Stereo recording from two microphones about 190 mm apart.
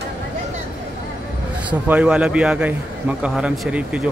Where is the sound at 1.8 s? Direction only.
10° right (ahead or behind).